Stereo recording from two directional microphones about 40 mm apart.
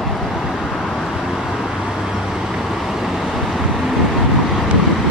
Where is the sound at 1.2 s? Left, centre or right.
Centre.